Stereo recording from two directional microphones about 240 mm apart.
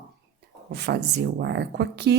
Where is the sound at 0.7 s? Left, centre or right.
Right.